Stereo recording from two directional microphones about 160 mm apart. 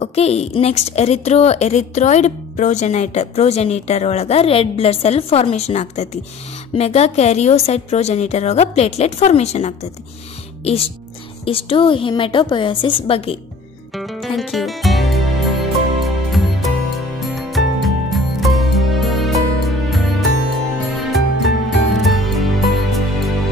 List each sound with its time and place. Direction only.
0.0 s a woman's voice: 40° left (ahead or behind)
13.9 s music: centre (ahead or behind)